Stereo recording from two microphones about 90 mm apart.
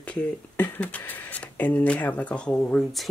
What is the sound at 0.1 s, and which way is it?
Speech, 15° left (ahead or behind).